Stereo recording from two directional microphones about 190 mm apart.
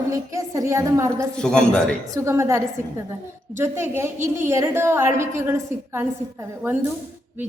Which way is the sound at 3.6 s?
15° right (ahead or behind).